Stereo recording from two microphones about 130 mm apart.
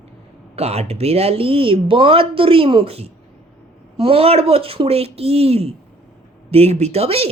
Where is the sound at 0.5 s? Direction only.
50° right (ahead or behind).